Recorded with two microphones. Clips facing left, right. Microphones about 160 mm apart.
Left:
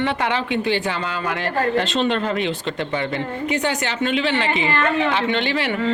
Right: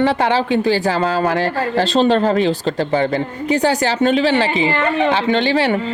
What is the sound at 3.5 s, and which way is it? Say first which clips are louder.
Speech: right 9 dB; 35° right (ahead or behind).